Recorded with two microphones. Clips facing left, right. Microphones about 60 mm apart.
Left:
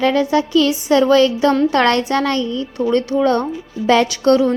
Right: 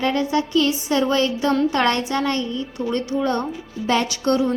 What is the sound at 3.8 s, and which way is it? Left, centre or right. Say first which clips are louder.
Speech: left 7 dB; left.